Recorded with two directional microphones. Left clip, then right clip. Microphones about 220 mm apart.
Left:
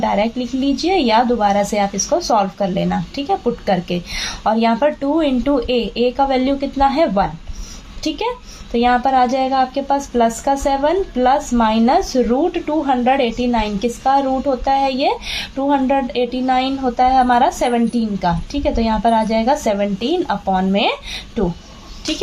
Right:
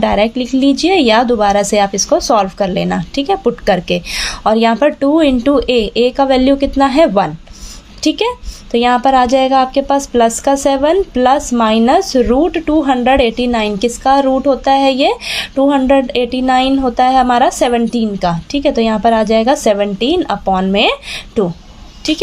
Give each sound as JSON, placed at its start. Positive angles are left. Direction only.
{"t": 0.0, "sound": "a woman's voice", "side_deg": -40}